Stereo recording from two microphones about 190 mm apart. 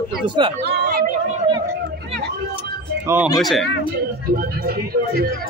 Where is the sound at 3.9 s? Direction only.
50° right (ahead or behind).